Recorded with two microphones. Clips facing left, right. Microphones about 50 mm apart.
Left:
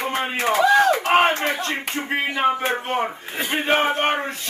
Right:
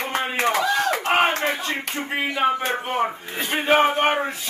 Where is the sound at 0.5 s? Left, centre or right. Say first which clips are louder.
Left 7 dB; centre.